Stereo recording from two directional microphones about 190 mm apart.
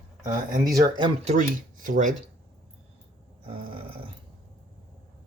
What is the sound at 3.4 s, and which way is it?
Grunt, 30° right (ahead or behind).